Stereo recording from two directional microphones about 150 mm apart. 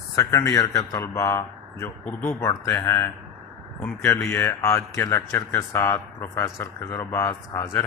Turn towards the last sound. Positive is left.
turn(degrees=20)  # may be behind; listen again after turning